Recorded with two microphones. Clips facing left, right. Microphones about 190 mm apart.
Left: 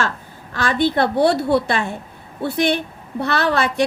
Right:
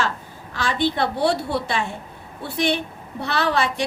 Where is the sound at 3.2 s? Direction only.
55° left (ahead or behind).